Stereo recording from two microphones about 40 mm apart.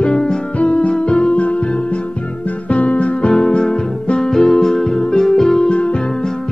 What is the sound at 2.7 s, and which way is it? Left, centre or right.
Music, left.